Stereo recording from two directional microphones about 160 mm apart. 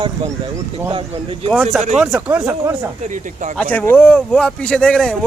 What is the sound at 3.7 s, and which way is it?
Speech, 10° left (ahead or behind).